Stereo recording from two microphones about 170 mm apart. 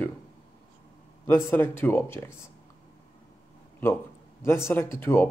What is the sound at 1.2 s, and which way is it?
Speech, 15° left (ahead or behind).